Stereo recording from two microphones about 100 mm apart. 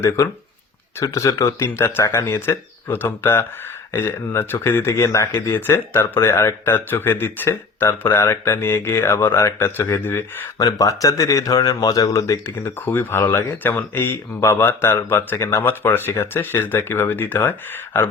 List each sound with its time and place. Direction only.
0.9 s speech: 30° left (ahead or behind)
10.6 s speech: 35° left (ahead or behind)
12.9 s speech: 20° left (ahead or behind)